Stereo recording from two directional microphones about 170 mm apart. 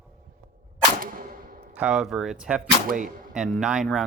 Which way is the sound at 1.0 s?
55° right (ahead or behind).